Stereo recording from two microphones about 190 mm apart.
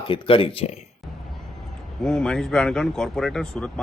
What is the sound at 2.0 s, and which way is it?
Speech, 5° left (ahead or behind).